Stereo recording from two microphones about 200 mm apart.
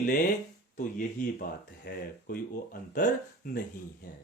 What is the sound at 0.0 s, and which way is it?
Speech, 45° left (ahead or behind).